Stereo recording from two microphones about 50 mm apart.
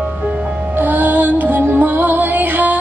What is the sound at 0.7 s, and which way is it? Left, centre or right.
Music, right.